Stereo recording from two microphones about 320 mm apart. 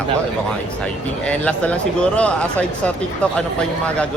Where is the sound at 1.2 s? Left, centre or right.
Centre.